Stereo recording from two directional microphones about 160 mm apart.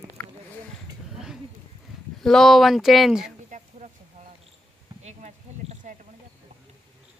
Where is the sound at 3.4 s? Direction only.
50° right (ahead or behind).